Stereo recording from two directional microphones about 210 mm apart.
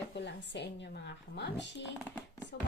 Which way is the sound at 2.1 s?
10° left (ahead or behind).